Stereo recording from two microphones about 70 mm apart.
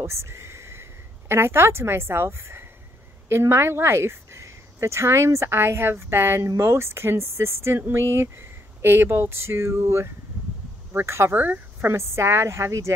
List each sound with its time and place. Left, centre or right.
0.0 s a sound: right
1.3 s speech: right
11.3 s speech: right
11.9 s speech: right